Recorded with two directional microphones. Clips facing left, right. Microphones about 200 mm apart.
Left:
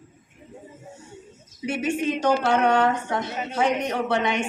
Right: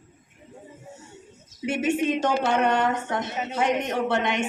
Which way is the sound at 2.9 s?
20° right (ahead or behind).